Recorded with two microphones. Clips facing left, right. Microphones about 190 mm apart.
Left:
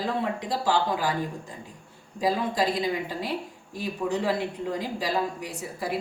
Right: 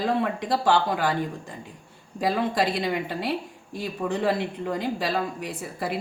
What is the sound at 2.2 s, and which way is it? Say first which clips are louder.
A woman's voice: right 1 dB; 65° right (ahead or behind).